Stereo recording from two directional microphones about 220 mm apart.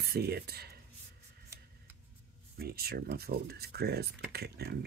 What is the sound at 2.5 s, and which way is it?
Speech, 45° right (ahead or behind).